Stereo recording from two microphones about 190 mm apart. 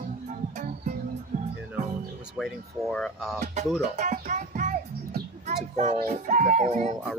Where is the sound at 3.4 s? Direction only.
40° right (ahead or behind).